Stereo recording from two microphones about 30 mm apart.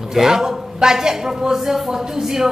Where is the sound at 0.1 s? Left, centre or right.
Centre.